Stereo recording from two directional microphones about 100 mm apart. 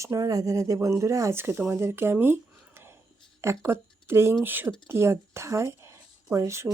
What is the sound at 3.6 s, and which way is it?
A woman's voice, 25° right (ahead or behind).